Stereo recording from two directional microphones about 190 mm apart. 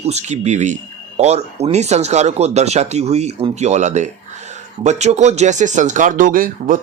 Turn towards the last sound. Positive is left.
turn(degrees=-45)  # may be behind; listen again after turning